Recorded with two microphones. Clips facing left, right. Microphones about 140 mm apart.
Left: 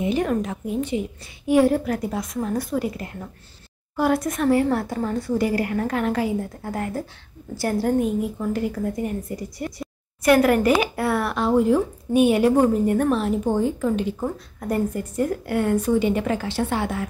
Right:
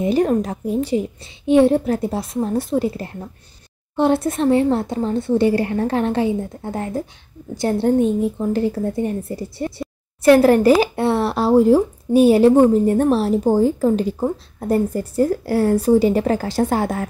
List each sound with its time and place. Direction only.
0.0 s a woman's voice: 35° right (ahead or behind)
1.4 s a woman's voice: 25° right (ahead or behind); by 17.1 s 40° right (ahead or behind)